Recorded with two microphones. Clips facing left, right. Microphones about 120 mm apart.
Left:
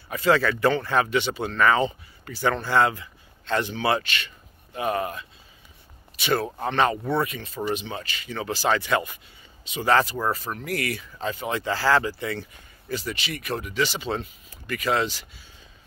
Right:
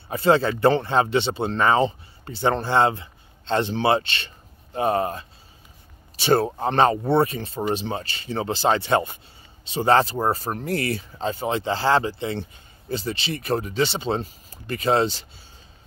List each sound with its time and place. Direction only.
0.1 s speech: 30° right (ahead or behind)